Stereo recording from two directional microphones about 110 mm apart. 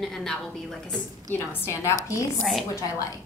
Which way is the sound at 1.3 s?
20° left (ahead or behind).